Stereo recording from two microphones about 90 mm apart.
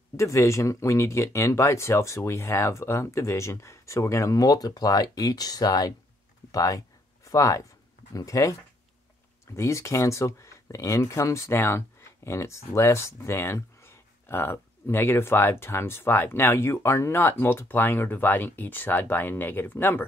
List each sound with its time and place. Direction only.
0.2 s speech: 35° left (ahead or behind)
9.6 s speech: 35° left (ahead or behind)